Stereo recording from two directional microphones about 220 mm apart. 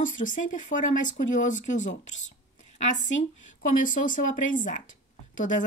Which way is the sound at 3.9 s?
35° left (ahead or behind).